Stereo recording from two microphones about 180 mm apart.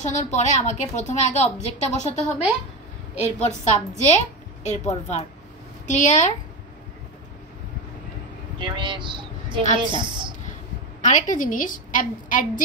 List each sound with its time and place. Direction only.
0.0 s a woman's voice: 40° left (ahead or behind)
8.5 s a woman's voice: 25° right (ahead or behind)
11.0 s a woman's voice: 45° left (ahead or behind)